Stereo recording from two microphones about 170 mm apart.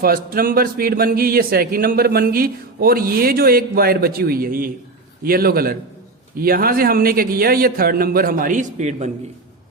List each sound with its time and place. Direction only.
0.0 s a man's voice: 60° right (ahead or behind); by 9.0 s 45° right (ahead or behind)